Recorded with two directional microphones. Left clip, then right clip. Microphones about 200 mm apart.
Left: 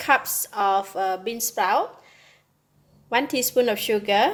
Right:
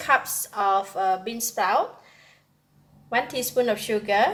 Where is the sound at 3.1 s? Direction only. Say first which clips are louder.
Left 2 dB; 45° left (ahead or behind).